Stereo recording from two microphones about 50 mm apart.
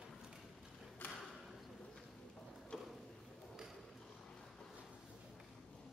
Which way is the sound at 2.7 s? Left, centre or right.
Centre.